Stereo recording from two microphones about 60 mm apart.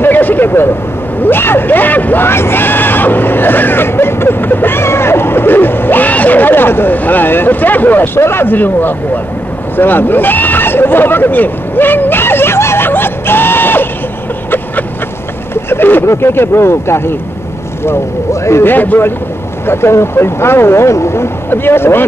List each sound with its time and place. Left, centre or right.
0.0 s a sound: left
1.2 s speech: left
9.8 s a sound: left
15.5 s vehicle: left
16.1 s speech: left
18.6 s a man's voice: left